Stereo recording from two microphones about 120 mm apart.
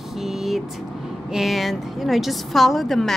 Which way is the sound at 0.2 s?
5° right (ahead or behind).